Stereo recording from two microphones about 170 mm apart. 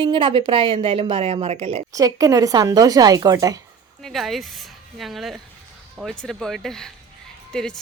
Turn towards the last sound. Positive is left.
turn(degrees=5)  # may be behind; listen again after turning